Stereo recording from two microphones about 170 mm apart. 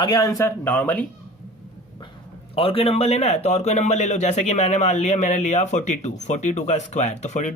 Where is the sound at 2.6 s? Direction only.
35° left (ahead or behind).